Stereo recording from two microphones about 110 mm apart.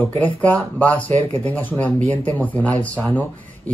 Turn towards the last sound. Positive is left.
turn(degrees=15)  # may be behind; listen again after turning